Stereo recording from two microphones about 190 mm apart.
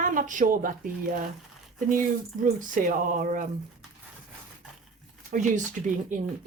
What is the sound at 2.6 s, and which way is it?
Speech, 45° right (ahead or behind).